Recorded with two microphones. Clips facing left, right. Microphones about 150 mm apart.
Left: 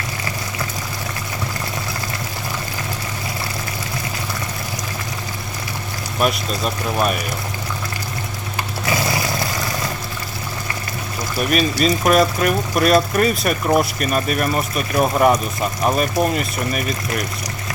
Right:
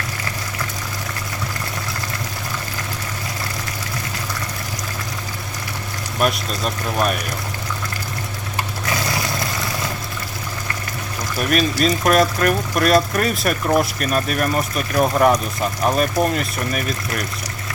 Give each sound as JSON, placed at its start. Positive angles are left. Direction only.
{"t": 6.1, "sound": "speech", "side_deg": 0}
{"t": 8.9, "sound": "vehicle", "side_deg": 5}
{"t": 11.3, "sound": "speech", "side_deg": 0}